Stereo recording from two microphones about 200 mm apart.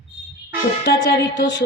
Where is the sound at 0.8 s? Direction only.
65° left (ahead or behind).